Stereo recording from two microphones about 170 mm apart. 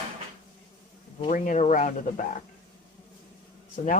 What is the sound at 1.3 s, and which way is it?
Speech, 50° left (ahead or behind).